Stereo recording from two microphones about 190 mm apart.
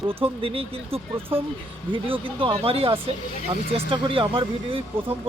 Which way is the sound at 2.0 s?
30° right (ahead or behind).